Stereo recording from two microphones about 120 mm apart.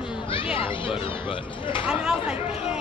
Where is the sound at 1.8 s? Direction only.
10° right (ahead or behind).